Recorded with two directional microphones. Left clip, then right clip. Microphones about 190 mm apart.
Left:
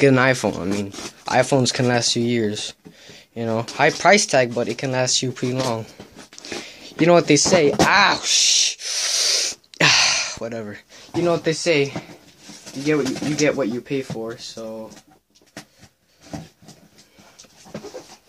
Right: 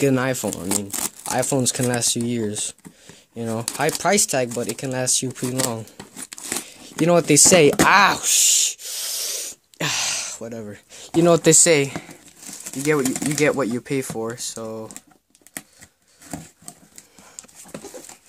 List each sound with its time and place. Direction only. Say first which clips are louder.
0.0 s speech: left 5 dB; 20° right (ahead or behind)
6.3 s a sound: right 1 dB; 30° right (ahead or behind); by 10.1 s 10° right (ahead or behind)
10.1 s gasp: left 5 dB; 30° right (ahead or behind)
10.9 s speech: right 4 dB; 55° right (ahead or behind)
11.8 s speech: left 2 dB; 15° right (ahead or behind)
12.8 s speech: even; 30° right (ahead or behind)